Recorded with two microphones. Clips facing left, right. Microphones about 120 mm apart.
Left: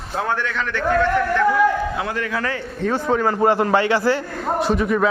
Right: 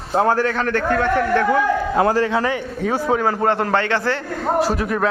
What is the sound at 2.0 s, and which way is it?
Speech, 35° right (ahead or behind).